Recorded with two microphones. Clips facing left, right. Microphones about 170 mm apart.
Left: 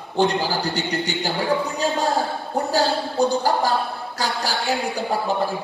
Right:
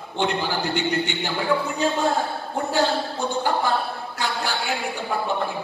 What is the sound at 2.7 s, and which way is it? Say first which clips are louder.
A woman's voice: left 2 dB; 35° left (ahead or behind).